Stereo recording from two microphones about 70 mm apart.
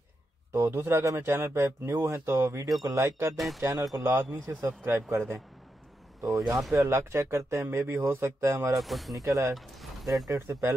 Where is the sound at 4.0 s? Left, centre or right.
Right.